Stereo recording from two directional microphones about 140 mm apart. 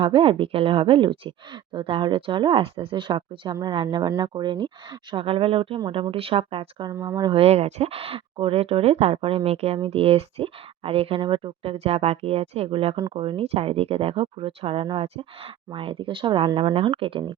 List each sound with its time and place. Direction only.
0.0 s speech: 40° right (ahead or behind)
6.9 s speech: 15° right (ahead or behind)
7.2 s speech: 40° right (ahead or behind)